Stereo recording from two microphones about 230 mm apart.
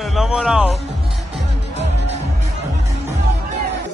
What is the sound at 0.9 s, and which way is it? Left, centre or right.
Music, centre.